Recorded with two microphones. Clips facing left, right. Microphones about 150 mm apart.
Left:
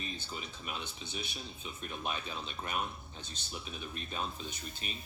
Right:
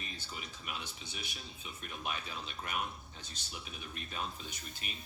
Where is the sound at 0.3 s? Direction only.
30° left (ahead or behind).